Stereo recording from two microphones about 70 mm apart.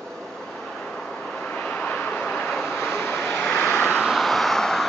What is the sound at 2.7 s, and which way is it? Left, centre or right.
Vehicle, left.